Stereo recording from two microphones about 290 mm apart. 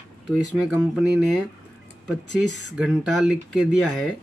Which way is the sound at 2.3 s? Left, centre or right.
Left.